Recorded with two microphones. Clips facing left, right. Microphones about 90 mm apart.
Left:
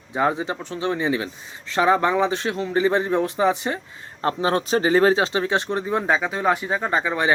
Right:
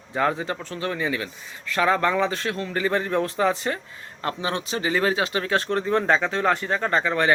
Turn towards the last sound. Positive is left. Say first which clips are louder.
# even
turn(degrees=15)  # may be behind; listen again after turning